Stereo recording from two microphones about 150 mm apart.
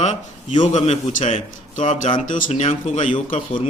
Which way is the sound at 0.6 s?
50° left (ahead or behind).